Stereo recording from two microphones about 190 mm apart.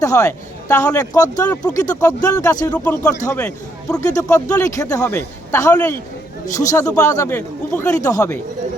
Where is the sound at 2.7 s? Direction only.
5° left (ahead or behind).